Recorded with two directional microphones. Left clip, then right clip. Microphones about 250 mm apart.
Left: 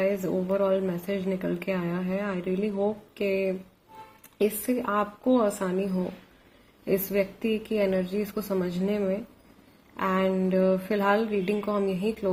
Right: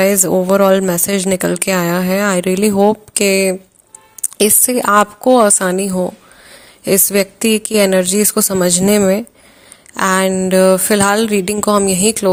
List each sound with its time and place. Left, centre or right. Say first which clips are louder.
0.0 s speech: right 14 dB; right
6.8 s speech: right 12 dB; right